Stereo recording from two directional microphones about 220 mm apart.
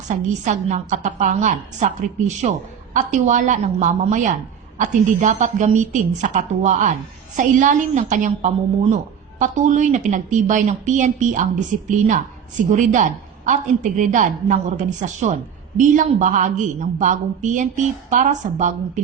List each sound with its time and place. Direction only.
0.1 s speech: 35° right (ahead or behind)